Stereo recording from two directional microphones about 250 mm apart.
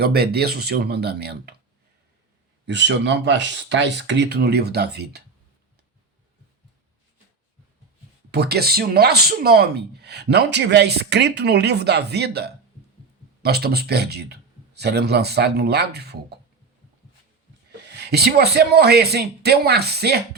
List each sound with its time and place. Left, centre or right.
0.0 s speech: right
2.6 s speech: right
8.3 s speech: right
17.7 s speech: right